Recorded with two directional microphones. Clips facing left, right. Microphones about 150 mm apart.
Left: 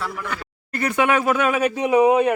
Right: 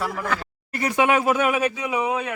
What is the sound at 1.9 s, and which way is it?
Speech, 50° left (ahead or behind).